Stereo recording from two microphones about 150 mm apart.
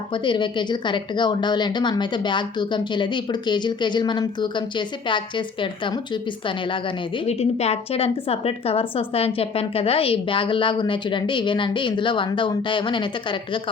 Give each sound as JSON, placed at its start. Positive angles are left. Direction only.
{"t": 0.1, "sound": "a woman's voice", "side_deg": 30}
{"t": 7.3, "sound": "a woman's voice", "side_deg": 45}